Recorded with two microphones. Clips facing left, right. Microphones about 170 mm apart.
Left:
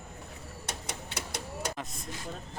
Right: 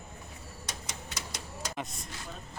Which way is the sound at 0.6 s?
60° left (ahead or behind).